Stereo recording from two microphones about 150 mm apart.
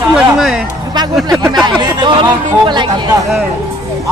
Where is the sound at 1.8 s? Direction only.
30° right (ahead or behind).